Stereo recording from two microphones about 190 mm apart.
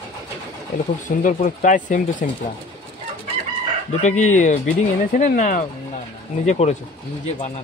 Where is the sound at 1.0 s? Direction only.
45° left (ahead or behind).